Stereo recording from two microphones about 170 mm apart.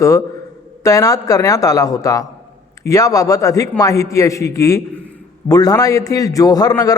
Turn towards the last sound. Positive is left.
turn(degrees=20)  # may be behind; listen again after turning